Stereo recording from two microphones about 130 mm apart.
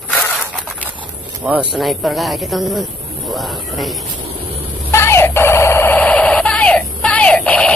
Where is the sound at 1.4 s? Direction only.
5° right (ahead or behind).